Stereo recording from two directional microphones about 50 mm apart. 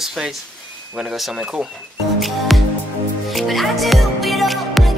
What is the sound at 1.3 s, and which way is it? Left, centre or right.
Speech, right.